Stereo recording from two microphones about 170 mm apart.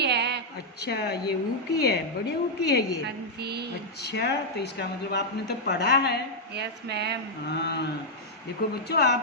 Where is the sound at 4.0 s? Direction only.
75° left (ahead or behind).